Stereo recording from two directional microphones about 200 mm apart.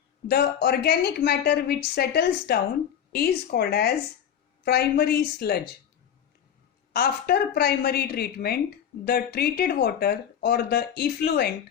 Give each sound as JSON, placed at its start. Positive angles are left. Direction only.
{"t": 0.3, "sound": "speech", "side_deg": 50}
{"t": 6.9, "sound": "speech", "side_deg": 50}